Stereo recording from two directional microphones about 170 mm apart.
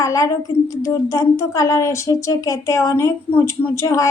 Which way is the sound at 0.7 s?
20° left (ahead or behind).